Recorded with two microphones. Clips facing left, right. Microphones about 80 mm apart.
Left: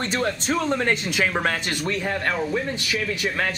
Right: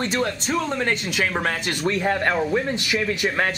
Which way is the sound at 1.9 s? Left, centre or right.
Centre.